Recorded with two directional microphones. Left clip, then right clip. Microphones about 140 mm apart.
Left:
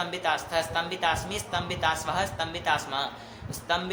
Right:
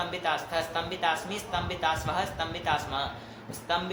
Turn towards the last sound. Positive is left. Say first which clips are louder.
# left 1 dB
turn(degrees=40)  # may be behind; listen again after turning